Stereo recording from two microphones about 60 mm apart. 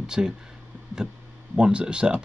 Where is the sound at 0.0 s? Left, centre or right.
Centre.